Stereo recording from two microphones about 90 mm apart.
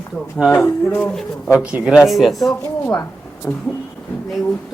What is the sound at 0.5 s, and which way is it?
Speech, 20° left (ahead or behind).